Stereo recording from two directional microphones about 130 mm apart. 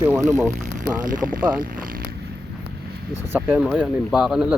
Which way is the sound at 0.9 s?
90° right.